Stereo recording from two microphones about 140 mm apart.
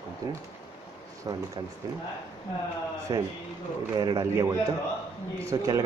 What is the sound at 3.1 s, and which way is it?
A man's voice, 25° right (ahead or behind).